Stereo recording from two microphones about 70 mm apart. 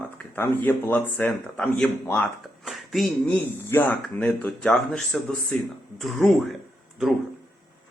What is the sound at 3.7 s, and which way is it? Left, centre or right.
Speech, left.